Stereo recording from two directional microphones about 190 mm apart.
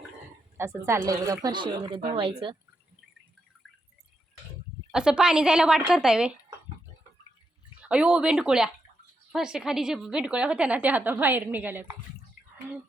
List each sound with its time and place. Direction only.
0.5 s a woman's voice: 15° right (ahead or behind)
4.9 s a woman's voice: 5° right (ahead or behind)
7.8 s a woman's voice: 5° right (ahead or behind)